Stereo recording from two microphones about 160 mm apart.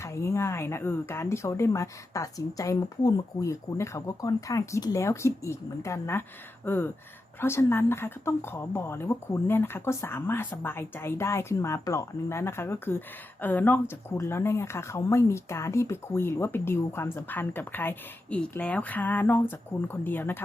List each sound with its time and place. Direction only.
0.0 s speech: 15° left (ahead or behind)